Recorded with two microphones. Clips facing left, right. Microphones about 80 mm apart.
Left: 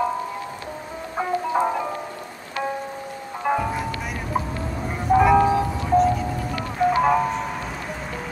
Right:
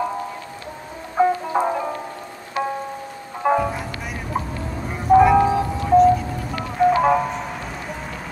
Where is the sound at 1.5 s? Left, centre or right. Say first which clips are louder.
Right 1 dB; centre.